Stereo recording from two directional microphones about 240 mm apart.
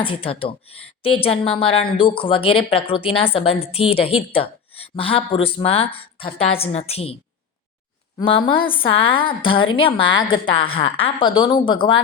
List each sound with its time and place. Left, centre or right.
0.0 s speech: left
8.2 s speech: left